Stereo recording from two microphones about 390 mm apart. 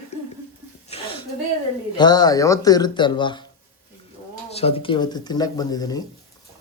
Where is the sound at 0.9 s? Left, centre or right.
Centre.